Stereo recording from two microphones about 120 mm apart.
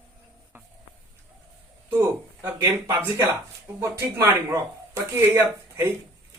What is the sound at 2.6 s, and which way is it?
A man's voice, 25° right (ahead or behind).